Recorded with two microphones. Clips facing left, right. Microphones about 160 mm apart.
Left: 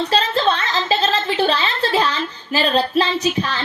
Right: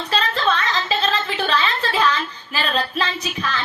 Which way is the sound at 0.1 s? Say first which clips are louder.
Right 1 dB; 35° left (ahead or behind).